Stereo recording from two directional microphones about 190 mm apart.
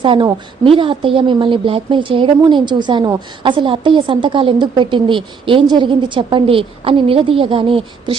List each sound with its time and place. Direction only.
0.0 s speech: 25° right (ahead or behind)